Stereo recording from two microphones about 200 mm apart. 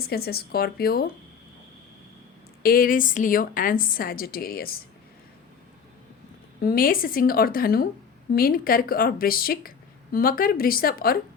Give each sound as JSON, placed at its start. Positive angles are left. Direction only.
{"t": 0.0, "sound": "speech", "side_deg": 50}
{"t": 2.6, "sound": "speech", "side_deg": 45}
{"t": 6.6, "sound": "speech", "side_deg": 45}